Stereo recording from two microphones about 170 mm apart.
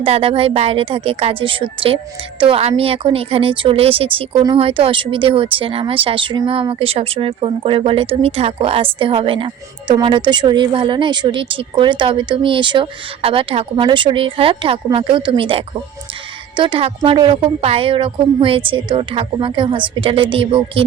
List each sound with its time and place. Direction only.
0.0 s a woman's voice: 35° right (ahead or behind)